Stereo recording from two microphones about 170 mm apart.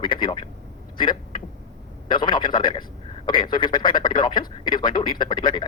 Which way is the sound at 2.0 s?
25° left (ahead or behind).